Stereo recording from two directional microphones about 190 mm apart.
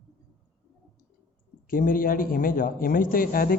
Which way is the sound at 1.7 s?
45° left (ahead or behind).